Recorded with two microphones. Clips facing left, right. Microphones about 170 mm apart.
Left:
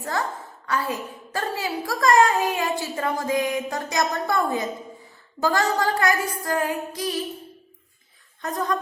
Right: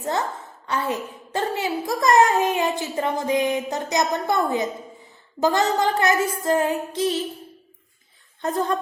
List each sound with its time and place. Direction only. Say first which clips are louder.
0.0 s a child's voice: right 2 dB; 20° right (ahead or behind)
8.4 s a child's voice: right 3 dB; 30° right (ahead or behind)